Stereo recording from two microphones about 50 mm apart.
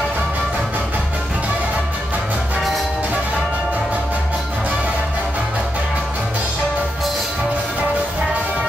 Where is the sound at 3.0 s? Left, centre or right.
Right.